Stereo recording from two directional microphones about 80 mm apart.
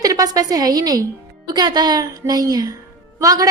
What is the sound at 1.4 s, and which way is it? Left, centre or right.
A woman's voice, right.